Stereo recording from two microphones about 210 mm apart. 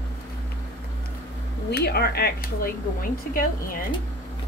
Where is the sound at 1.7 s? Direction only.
50° left (ahead or behind).